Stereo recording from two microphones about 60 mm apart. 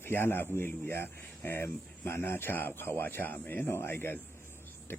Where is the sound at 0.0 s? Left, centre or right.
Left.